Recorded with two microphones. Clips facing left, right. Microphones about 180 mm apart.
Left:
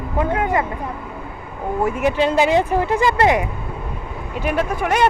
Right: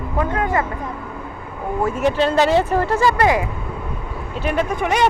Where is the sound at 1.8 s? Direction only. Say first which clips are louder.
Even; 10° left (ahead or behind).